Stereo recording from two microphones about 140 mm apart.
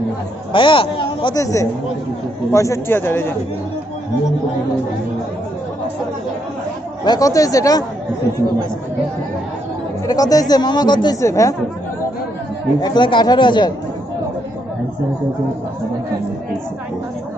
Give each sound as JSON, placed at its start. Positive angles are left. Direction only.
{"t": 0.5, "sound": "a man's voice", "side_deg": 35}
{"t": 1.3, "sound": "a man's voice", "side_deg": 25}
{"t": 7.1, "sound": "speech", "side_deg": 25}
{"t": 10.0, "sound": "speech", "side_deg": 25}
{"t": 12.8, "sound": "speech", "side_deg": 35}